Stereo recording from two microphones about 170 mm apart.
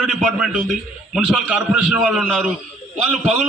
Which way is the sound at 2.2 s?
5° left (ahead or behind).